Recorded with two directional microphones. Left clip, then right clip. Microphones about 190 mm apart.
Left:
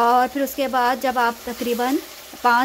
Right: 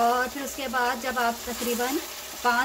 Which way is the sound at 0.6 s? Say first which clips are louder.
Left 6 dB; 45° left (ahead or behind).